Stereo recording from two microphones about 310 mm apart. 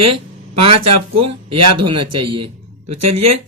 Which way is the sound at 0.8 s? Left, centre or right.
Right.